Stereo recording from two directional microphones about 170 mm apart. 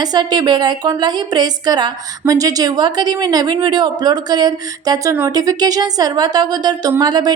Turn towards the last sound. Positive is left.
turn(degrees=-25)  # may be behind; listen again after turning